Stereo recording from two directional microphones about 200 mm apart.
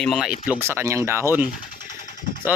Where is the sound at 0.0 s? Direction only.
Centre (ahead or behind).